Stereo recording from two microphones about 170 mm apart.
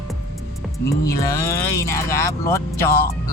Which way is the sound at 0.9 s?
20° left (ahead or behind).